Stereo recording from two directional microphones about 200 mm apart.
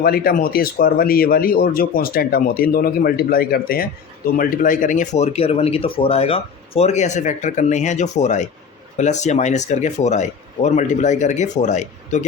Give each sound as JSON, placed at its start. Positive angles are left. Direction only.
{"t": 0.0, "sound": "speech", "side_deg": 50}